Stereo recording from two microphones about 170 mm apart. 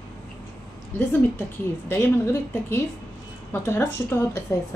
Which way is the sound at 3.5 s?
15° left (ahead or behind).